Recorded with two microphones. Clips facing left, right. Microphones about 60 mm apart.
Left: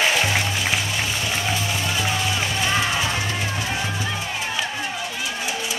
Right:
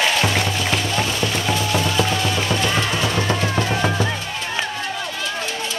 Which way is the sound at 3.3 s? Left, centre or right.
Right.